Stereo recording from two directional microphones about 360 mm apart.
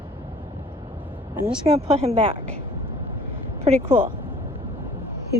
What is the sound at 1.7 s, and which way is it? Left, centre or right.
Speech, centre.